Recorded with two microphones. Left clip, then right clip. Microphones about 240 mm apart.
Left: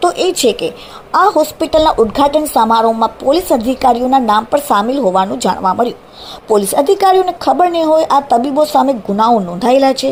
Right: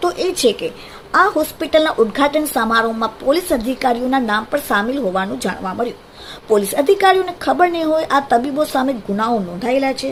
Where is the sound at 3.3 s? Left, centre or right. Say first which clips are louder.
Left 5 dB; centre.